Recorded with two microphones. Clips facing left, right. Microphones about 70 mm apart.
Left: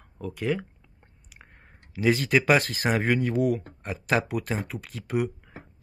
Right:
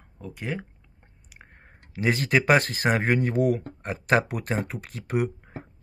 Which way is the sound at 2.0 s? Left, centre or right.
Right.